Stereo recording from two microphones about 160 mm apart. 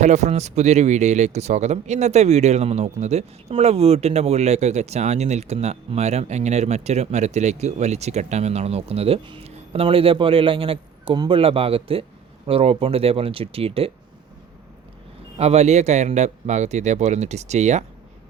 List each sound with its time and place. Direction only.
0.0 s speech: 45° right (ahead or behind)
15.4 s speech: 40° right (ahead or behind)